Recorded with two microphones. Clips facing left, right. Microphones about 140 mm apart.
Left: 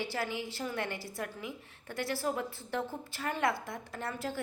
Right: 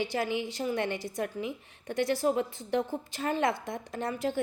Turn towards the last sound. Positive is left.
turn(degrees=-20)  # may be behind; listen again after turning